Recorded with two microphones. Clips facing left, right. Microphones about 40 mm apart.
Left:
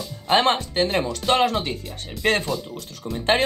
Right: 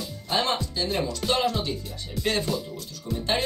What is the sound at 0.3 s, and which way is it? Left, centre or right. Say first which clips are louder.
Speech: left 7 dB; left.